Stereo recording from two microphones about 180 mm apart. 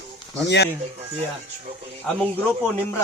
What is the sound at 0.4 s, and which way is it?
Speech, 70° left (ahead or behind).